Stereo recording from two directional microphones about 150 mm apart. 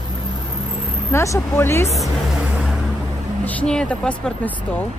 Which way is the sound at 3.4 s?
10° left (ahead or behind).